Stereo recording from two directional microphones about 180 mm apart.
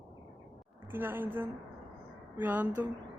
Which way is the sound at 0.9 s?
10° right (ahead or behind).